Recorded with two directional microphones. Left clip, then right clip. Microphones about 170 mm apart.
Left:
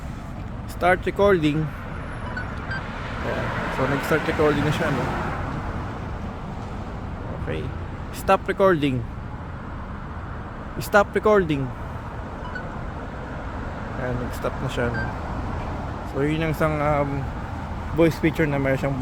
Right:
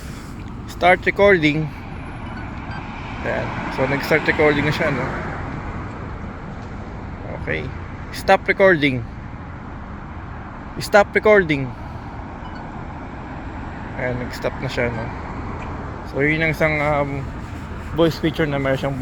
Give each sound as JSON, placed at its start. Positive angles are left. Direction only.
{"t": 0.8, "sound": "speech", "side_deg": 0}
{"t": 2.7, "sound": "vehicle", "side_deg": 35}
{"t": 4.3, "sound": "speech", "side_deg": 0}
{"t": 8.3, "sound": "speech", "side_deg": 0}
{"t": 10.8, "sound": "speech", "side_deg": 5}
{"t": 14.4, "sound": "speech", "side_deg": 0}
{"t": 16.2, "sound": "speech", "side_deg": 0}